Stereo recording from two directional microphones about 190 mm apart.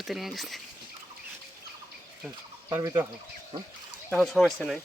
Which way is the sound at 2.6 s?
15° right (ahead or behind).